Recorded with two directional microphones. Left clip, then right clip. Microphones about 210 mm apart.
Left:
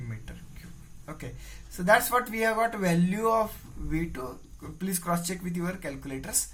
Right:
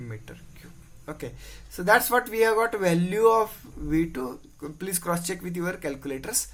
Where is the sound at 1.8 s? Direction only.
40° right (ahead or behind).